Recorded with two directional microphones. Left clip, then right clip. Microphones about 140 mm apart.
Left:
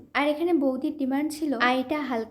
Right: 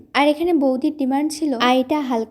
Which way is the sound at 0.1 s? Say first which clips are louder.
Right 7 dB; 40° right (ahead or behind).